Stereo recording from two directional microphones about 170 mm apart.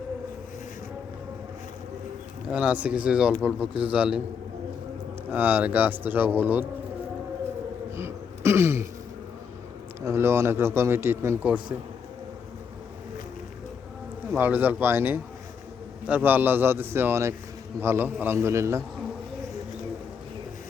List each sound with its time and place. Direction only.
2.5 s a man's voice: 5° right (ahead or behind)
5.3 s a man's voice: 10° right (ahead or behind)
7.9 s throat clearing: 15° right (ahead or behind)
10.1 s a man's voice: 15° right (ahead or behind)
14.3 s a man's voice: 10° right (ahead or behind)